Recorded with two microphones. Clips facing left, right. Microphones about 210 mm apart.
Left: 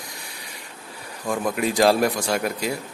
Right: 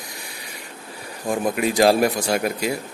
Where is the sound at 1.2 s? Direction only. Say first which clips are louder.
Right 2 dB; 20° right (ahead or behind).